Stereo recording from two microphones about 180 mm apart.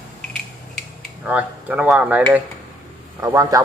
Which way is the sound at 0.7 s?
5° right (ahead or behind).